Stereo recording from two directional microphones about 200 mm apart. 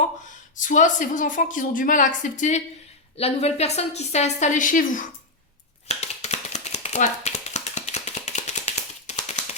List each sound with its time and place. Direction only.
0.5 s a woman's voice: 40° left (ahead or behind)
5.9 s tap: 35° left (ahead or behind)